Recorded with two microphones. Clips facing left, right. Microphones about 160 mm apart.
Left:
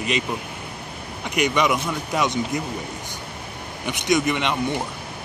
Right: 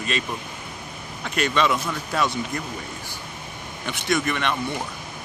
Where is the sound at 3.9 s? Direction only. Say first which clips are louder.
Left 3 dB; 15° left (ahead or behind).